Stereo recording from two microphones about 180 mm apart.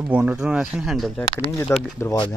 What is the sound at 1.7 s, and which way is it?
Speech, 15° left (ahead or behind).